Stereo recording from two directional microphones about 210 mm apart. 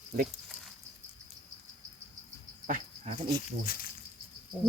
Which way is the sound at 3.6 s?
45° left (ahead or behind).